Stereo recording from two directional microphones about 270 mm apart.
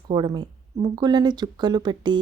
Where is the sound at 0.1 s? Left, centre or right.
Centre.